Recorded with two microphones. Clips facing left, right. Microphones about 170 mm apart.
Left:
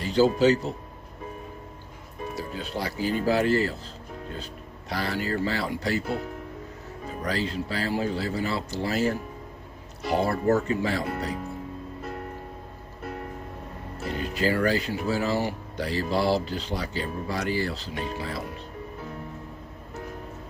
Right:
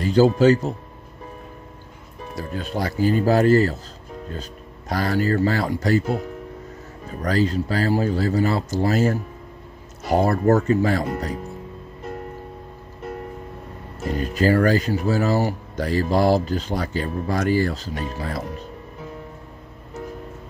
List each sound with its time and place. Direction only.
0.0 s speech: 45° right (ahead or behind)
2.3 s speech: 50° right (ahead or behind)
7.2 s speech: 45° right (ahead or behind)
14.2 s speech: 45° right (ahead or behind)